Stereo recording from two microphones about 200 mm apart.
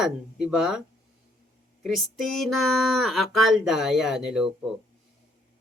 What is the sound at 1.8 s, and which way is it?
Speech, centre (ahead or behind).